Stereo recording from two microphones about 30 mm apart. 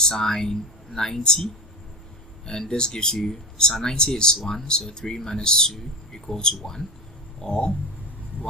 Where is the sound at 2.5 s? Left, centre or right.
Left.